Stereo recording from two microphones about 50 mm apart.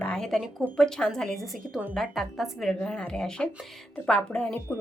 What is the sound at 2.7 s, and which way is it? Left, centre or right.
A woman's voice, centre.